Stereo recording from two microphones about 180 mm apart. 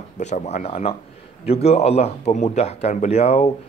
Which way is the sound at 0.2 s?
40° left (ahead or behind).